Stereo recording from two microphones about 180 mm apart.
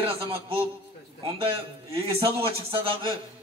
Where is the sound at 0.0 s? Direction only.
30° right (ahead or behind).